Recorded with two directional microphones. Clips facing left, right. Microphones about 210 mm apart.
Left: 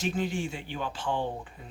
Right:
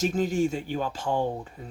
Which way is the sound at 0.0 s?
45° right (ahead or behind).